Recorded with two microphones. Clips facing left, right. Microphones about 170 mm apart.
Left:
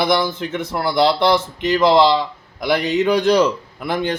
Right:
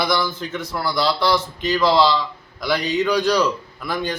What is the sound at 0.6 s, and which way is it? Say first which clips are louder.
Speech: left 3 dB; 25° left (ahead or behind).